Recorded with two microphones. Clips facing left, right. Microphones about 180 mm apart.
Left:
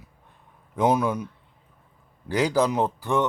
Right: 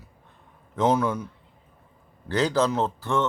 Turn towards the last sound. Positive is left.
turn(degrees=15)  # may be behind; listen again after turning